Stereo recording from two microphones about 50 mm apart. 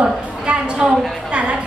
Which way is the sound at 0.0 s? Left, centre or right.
Centre.